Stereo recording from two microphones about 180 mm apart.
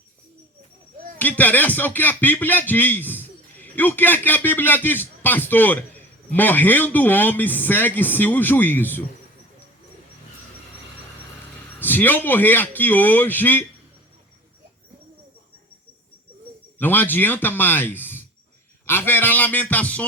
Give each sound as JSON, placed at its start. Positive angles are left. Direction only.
{"t": 1.2, "sound": "speech", "side_deg": 10}
{"t": 11.8, "sound": "speech", "side_deg": 10}
{"t": 16.7, "sound": "speech", "side_deg": 10}